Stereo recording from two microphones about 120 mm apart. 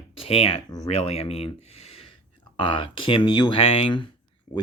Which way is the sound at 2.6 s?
45° left (ahead or behind).